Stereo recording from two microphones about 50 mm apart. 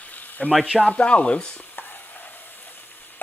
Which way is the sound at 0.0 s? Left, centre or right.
Left.